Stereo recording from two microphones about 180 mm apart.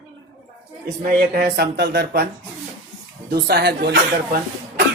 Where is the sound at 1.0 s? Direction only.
50° right (ahead or behind).